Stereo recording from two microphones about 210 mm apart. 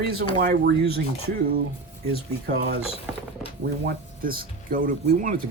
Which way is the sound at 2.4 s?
50° right (ahead or behind).